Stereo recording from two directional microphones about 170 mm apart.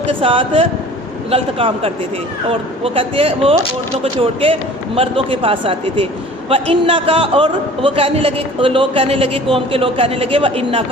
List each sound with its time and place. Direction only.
0.1 s a man's voice: 35° right (ahead or behind)